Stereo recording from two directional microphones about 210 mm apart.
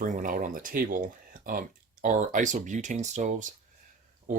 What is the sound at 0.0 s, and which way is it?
Speech, 40° right (ahead or behind).